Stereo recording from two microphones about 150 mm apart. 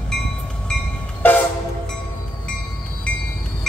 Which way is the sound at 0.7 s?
10° left (ahead or behind).